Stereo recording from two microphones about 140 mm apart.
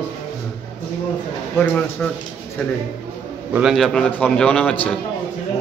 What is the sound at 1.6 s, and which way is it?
Speech, 10° left (ahead or behind).